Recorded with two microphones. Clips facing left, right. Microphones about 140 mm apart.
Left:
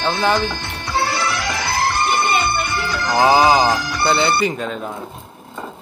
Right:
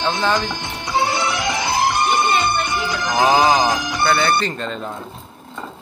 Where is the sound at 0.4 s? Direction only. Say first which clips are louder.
Left 2 dB; 15° right (ahead or behind).